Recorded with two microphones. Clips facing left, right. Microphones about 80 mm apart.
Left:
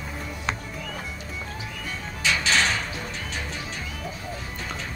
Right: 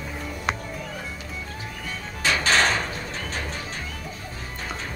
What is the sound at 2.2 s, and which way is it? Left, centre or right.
Music, right.